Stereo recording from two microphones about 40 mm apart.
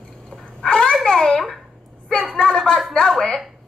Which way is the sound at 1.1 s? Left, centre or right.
Left.